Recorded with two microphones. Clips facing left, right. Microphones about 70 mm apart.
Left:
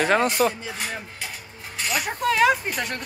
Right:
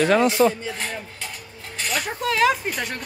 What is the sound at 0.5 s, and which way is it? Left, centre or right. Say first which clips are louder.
Speech: right 3 dB; centre.